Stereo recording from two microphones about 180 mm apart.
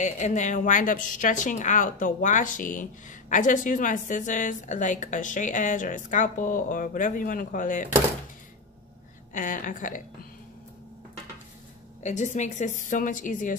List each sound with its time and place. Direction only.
0.0 s a woman's voice: 40° left (ahead or behind)
9.3 s a woman's voice: 50° left (ahead or behind)
12.0 s a woman's voice: 40° left (ahead or behind)